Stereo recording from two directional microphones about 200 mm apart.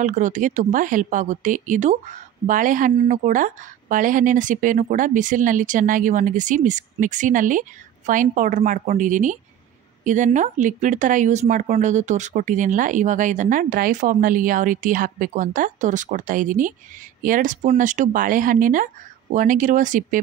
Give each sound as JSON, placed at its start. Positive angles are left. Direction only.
{"t": 0.0, "sound": "speech", "side_deg": -40}